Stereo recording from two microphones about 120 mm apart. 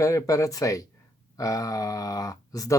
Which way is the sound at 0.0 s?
25° left (ahead or behind).